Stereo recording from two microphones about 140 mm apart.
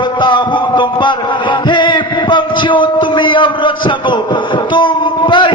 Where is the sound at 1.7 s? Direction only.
35° left (ahead or behind).